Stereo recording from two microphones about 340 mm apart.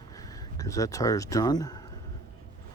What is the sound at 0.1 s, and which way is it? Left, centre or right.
Speech, centre.